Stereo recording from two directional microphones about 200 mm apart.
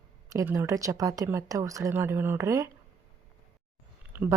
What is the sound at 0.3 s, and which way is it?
A woman's voice, 15° right (ahead or behind).